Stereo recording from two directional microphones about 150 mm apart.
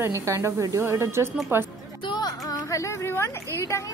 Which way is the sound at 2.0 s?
30° left (ahead or behind).